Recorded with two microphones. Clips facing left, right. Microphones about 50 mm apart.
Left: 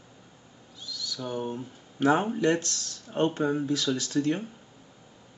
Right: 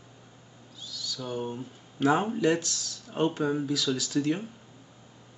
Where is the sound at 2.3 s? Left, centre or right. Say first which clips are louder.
Even; left.